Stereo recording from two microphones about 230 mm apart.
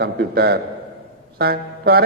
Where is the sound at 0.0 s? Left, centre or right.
Right.